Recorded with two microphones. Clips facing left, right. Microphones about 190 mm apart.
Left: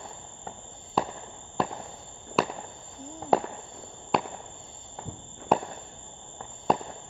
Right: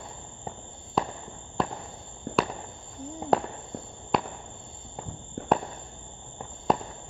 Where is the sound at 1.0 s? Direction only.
Centre (ahead or behind).